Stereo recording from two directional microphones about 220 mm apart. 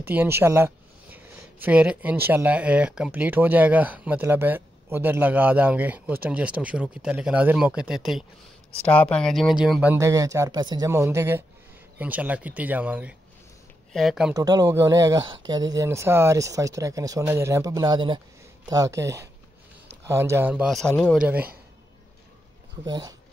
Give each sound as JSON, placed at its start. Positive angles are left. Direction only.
{"t": 0.0, "sound": "speech", "side_deg": -10}
{"t": 14.3, "sound": "speech", "side_deg": -15}
{"t": 21.2, "sound": "speech", "side_deg": -5}
{"t": 22.8, "sound": "speech", "side_deg": -20}